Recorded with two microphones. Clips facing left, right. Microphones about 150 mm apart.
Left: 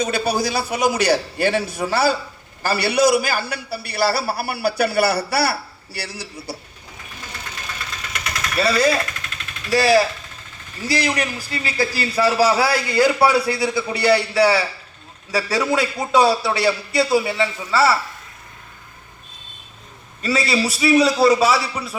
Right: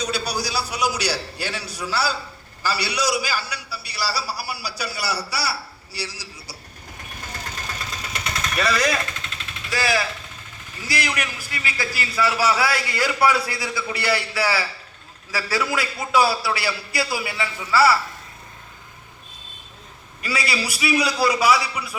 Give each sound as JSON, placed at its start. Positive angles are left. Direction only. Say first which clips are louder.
{"t": 0.0, "sound": "a man's voice", "louder": "left 6 dB", "side_deg": 50}
{"t": 7.3, "sound": "vehicle", "louder": "even", "side_deg": -40}
{"t": 8.5, "sound": "a man's voice", "louder": "left 5 dB", "side_deg": 30}
{"t": 9.1, "sound": "vehicle", "louder": "left 1 dB", "side_deg": -25}
{"t": 9.6, "sound": "a man's voice", "louder": "left 8 dB", "side_deg": 30}
{"t": 20.2, "sound": "a man's voice", "louder": "left 6 dB", "side_deg": 25}